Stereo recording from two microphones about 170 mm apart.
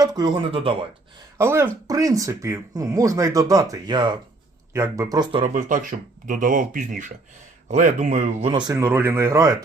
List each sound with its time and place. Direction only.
0.0 s speech: 25° right (ahead or behind)
1.4 s speech: 15° right (ahead or behind)
5.5 s speech: 50° right (ahead or behind); by 9.6 s 15° right (ahead or behind)